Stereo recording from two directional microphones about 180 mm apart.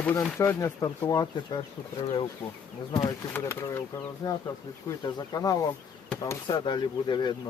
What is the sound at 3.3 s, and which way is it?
Speech, 15° left (ahead or behind).